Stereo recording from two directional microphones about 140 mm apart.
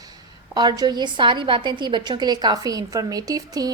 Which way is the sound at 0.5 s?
30° right (ahead or behind).